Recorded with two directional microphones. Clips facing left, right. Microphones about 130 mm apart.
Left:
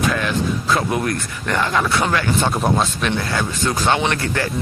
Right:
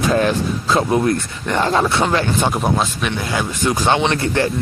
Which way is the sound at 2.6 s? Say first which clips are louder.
Even; centre (ahead or behind).